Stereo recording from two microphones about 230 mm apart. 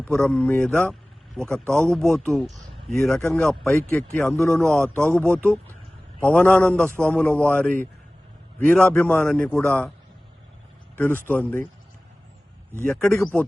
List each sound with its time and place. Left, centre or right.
0.0 s a man's voice: centre
10.9 s speech: centre
12.8 s a man's voice: centre